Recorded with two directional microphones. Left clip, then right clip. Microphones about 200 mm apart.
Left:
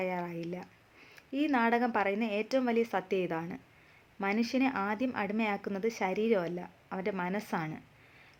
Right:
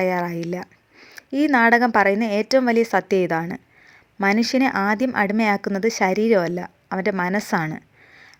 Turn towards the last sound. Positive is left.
turn(degrees=-40)  # may be behind; listen again after turning